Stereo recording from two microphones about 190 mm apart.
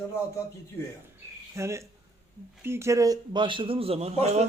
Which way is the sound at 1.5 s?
15° right (ahead or behind).